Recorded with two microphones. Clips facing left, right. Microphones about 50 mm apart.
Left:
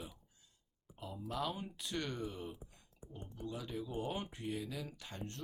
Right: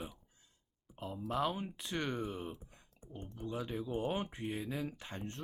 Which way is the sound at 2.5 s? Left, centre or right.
Centre.